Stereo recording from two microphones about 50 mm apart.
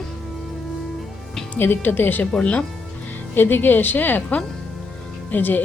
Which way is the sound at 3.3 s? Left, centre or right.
Left.